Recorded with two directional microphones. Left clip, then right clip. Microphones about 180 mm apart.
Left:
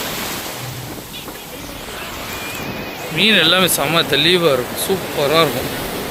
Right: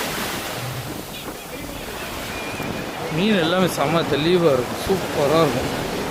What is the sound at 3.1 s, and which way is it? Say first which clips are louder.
Speech: left 7 dB; 5° left (ahead or behind).